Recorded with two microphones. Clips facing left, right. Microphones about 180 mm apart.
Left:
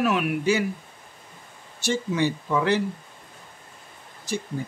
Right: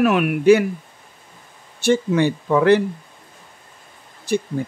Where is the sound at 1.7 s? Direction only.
60° right (ahead or behind).